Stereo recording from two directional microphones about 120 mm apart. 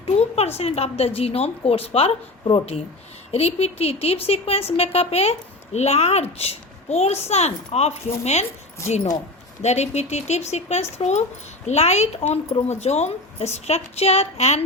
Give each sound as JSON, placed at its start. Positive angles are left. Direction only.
{"t": 0.0, "sound": "speech", "side_deg": 60}
{"t": 9.6, "sound": "speech", "side_deg": 70}